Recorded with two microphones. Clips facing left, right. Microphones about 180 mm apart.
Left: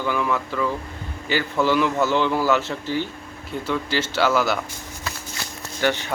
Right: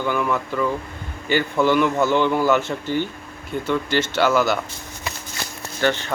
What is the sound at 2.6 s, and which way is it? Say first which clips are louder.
Speech: right 2 dB; 55° right (ahead or behind).